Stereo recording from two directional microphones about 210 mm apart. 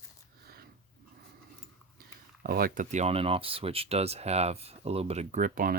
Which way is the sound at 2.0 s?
45° right (ahead or behind).